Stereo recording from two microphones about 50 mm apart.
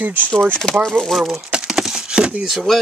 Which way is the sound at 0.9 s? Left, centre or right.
Centre.